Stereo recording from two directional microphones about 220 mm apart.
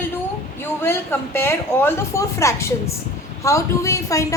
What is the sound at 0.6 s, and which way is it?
A woman's voice, 10° left (ahead or behind).